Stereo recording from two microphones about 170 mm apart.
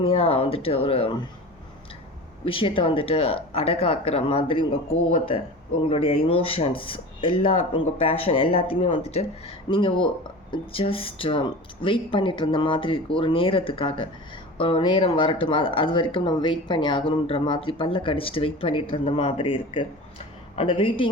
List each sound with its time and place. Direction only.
0.0 s speech: 35° left (ahead or behind)
2.4 s speech: 30° left (ahead or behind)